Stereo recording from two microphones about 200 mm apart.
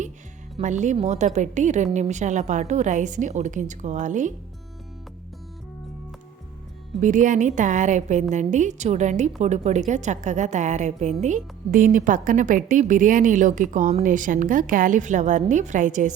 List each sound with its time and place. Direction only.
0.5 s a woman's voice: 35° right (ahead or behind)
7.0 s a woman's voice: 40° right (ahead or behind)